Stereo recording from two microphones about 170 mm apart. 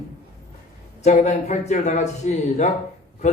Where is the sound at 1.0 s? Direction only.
45° left (ahead or behind).